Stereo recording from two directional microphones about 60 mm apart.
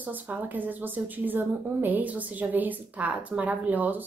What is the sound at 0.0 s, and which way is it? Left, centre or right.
A woman's voice, right.